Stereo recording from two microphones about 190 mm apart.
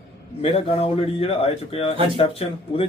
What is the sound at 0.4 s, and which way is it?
Speech, 30° left (ahead or behind).